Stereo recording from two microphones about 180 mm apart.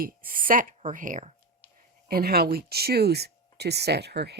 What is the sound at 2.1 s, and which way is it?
Speech, 60° right (ahead or behind).